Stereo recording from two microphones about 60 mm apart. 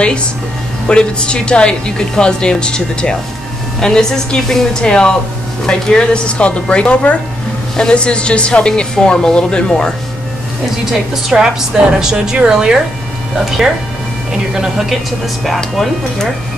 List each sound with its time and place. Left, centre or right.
0.8 s a woman's voice: centre
10.9 s a woman's voice: centre
14.9 s speech: centre